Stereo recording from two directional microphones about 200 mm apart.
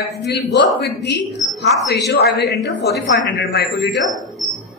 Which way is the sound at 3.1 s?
55° left (ahead or behind).